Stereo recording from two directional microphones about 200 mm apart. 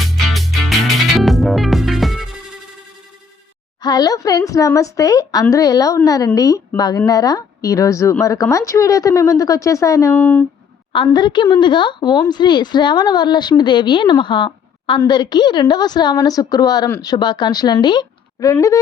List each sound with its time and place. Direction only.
0.3 s music: centre (ahead or behind)
3.8 s a woman's voice: 20° left (ahead or behind)
10.9 s speech: 25° left (ahead or behind)